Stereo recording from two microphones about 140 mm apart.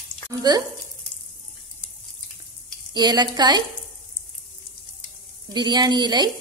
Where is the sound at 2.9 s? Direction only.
30° right (ahead or behind).